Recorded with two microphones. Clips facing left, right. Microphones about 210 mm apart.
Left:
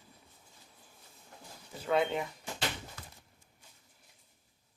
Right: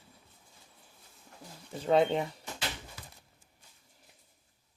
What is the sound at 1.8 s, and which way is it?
Speech, 30° right (ahead or behind).